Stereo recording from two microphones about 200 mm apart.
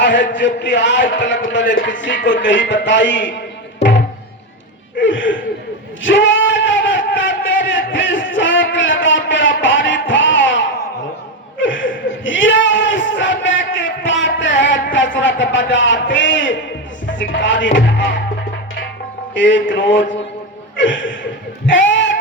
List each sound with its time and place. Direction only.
0.0 s a man's voice: 65° left (ahead or behind)
4.9 s speech: 65° left (ahead or behind)
6.0 s a sound: 70° left (ahead or behind)
11.6 s chuckle: 70° left (ahead or behind)
13.7 s a sound: 65° left (ahead or behind)
14.9 s a man's voice: 65° left (ahead or behind)
19.3 s a man's voice: 65° left (ahead or behind)
20.7 s chuckle: 65° left (ahead or behind)
21.7 s a sound: 65° left (ahead or behind)